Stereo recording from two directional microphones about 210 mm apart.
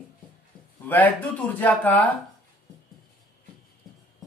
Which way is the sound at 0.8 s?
10° left (ahead or behind).